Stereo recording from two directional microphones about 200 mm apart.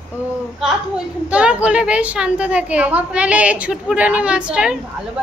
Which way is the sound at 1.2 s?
5° right (ahead or behind).